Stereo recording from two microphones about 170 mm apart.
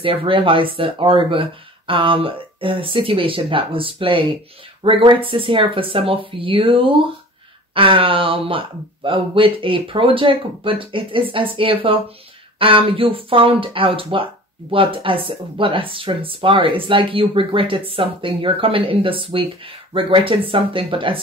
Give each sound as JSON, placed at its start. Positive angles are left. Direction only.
{"t": 0.0, "sound": "speech", "side_deg": -30}